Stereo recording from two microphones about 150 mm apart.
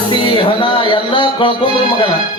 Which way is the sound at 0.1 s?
35° left (ahead or behind).